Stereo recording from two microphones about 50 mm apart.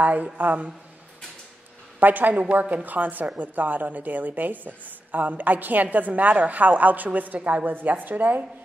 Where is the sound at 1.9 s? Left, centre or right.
Right.